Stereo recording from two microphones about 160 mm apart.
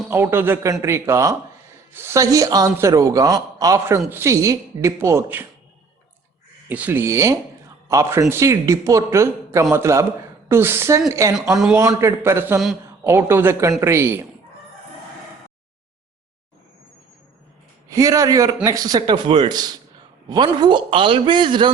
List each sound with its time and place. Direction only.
0.1 s a man's voice: 15° right (ahead or behind)
6.7 s a man's voice: 10° right (ahead or behind)
17.8 s a man's voice: 20° right (ahead or behind)